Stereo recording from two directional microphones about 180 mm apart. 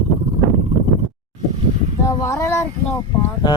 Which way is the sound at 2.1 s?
15° left (ahead or behind).